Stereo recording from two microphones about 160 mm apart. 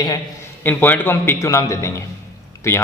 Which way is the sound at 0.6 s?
10° left (ahead or behind).